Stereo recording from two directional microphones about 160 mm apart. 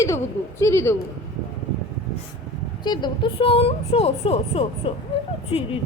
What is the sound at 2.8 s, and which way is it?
Speech, 25° left (ahead or behind).